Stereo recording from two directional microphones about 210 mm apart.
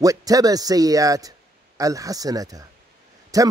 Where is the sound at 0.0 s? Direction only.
15° right (ahead or behind).